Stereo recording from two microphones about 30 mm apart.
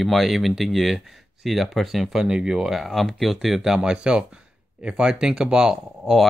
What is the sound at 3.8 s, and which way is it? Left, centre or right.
Speech, right.